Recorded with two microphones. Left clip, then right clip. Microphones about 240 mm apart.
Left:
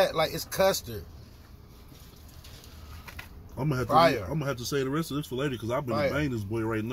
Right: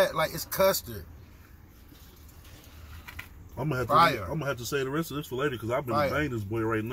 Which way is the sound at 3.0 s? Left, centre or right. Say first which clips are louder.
Right 1 dB; centre.